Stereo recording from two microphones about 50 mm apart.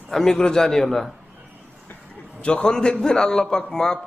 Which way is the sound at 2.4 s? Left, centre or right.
Left.